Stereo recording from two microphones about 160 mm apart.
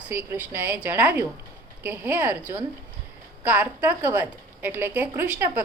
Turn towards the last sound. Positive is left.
turn(degrees=-10)  # may be behind; listen again after turning